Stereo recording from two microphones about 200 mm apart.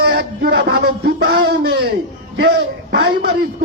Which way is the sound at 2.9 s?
55° right (ahead or behind).